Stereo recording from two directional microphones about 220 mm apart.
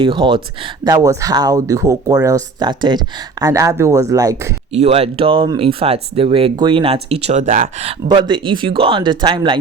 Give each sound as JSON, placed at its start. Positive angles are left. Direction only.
{"t": 0.0, "sound": "speech", "side_deg": -20}
{"t": 4.7, "sound": "speech", "side_deg": -30}